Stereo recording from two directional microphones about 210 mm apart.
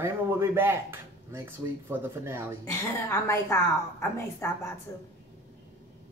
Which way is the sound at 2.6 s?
10° left (ahead or behind).